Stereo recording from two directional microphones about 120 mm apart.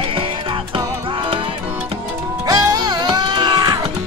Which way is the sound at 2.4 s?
30° right (ahead or behind).